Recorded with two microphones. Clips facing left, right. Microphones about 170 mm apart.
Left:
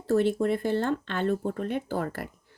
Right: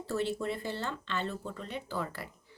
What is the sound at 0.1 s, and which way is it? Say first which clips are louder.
Speech: left 9 dB; 50° left (ahead or behind).